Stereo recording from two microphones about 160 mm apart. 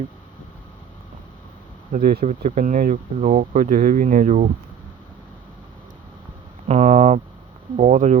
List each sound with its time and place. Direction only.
1.9 s speech: 70° right (ahead or behind)
2.2 s speech: 50° right (ahead or behind)
6.7 s speech: 45° right (ahead or behind)